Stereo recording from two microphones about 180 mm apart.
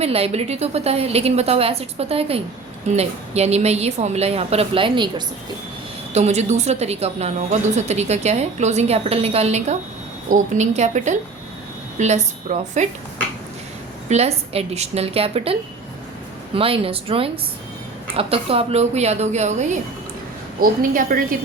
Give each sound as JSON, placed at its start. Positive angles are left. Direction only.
{"t": 0.0, "sound": "a woman's voice", "side_deg": -35}
{"t": 6.1, "sound": "a woman's voice", "side_deg": -40}
{"t": 14.1, "sound": "a woman's voice", "side_deg": -35}
{"t": 16.6, "sound": "a woman's voice", "side_deg": -30}
{"t": 20.6, "sound": "a woman's voice", "side_deg": -50}